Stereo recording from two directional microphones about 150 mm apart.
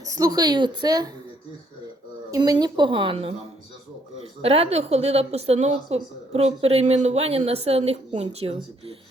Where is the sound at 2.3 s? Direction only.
25° right (ahead or behind).